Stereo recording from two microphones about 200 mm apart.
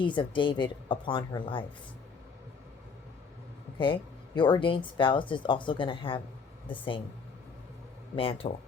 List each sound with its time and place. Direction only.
0.0 s speech: 25° left (ahead or behind)
3.8 s speech: 25° left (ahead or behind)
8.1 s speech: 25° left (ahead or behind)